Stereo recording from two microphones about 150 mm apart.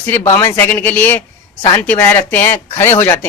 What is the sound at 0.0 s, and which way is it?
Speech, 15° left (ahead or behind).